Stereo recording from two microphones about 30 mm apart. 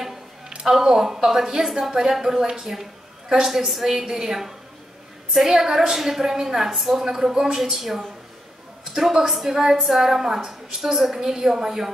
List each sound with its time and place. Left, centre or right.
0.7 s a woman's voice: centre
5.6 s a woman's voice: centre
7.1 s a woman's voice: centre